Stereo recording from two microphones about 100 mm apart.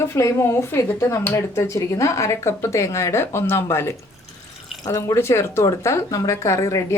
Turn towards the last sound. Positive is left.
turn(degrees=30)  # may be behind; listen again after turning